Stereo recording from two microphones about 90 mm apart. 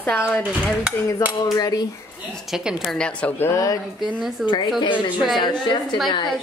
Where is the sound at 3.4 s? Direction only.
35° left (ahead or behind).